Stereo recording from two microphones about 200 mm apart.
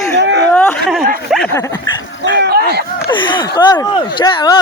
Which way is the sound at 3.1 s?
25° left (ahead or behind).